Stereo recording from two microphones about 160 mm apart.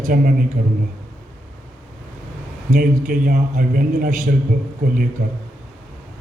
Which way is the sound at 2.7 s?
55° right (ahead or behind).